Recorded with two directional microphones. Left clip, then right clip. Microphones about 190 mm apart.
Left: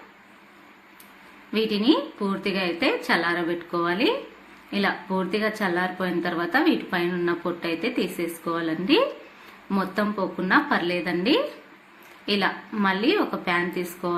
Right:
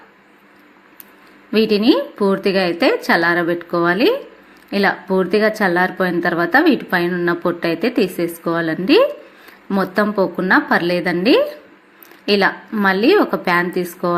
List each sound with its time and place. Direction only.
1.5 s a woman's voice: 40° right (ahead or behind)